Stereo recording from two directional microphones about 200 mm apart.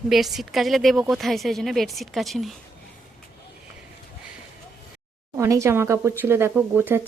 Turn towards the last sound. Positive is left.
turn(degrees=-10)  # may be behind; listen again after turning